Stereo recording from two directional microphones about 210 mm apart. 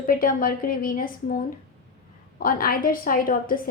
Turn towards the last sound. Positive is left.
turn(degrees=40)  # may be behind; listen again after turning